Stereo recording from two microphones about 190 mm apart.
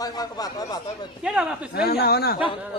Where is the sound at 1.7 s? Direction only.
55° left (ahead or behind).